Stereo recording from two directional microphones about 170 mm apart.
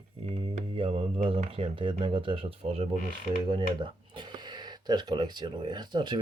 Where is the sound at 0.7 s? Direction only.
30° right (ahead or behind).